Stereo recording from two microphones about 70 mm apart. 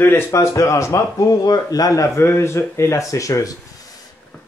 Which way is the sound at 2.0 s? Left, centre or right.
Left.